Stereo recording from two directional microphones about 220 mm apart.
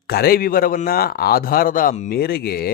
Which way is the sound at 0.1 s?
45° left (ahead or behind).